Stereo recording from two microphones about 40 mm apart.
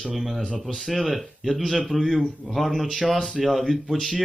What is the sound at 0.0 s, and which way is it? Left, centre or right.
A man's voice, centre.